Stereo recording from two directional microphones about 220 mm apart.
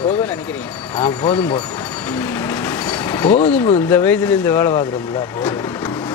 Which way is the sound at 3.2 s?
30° left (ahead or behind).